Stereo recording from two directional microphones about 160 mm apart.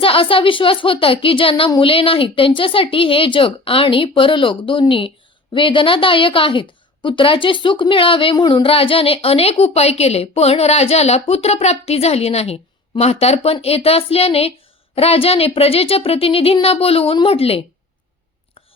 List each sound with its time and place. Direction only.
0.0 s a woman's voice: 35° left (ahead or behind)